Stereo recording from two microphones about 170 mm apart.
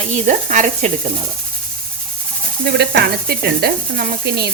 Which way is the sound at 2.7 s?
70° right (ahead or behind).